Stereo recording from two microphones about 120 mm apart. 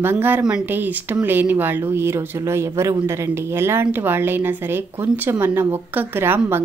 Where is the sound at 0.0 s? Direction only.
15° right (ahead or behind).